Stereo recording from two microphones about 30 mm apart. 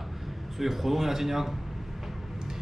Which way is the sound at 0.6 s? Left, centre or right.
Centre.